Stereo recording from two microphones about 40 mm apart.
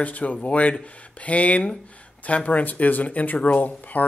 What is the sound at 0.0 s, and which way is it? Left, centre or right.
Speech, left.